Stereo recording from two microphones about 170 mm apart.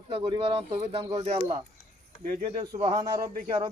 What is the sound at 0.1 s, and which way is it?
Speech, 30° right (ahead or behind).